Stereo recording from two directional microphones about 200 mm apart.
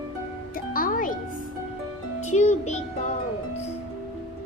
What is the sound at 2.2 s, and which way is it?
Music, 35° left (ahead or behind).